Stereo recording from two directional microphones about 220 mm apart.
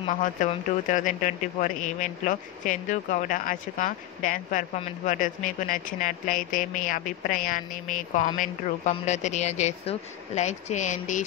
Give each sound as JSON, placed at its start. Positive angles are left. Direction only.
{"t": 0.2, "sound": "speech", "side_deg": 35}